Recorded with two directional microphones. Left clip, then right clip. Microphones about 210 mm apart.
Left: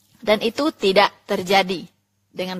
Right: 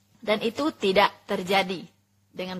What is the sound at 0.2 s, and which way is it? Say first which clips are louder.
A woman's voice: left 6 dB; 35° left (ahead or behind).